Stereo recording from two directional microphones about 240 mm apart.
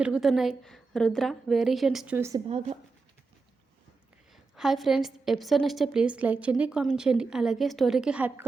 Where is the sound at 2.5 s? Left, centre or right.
Right.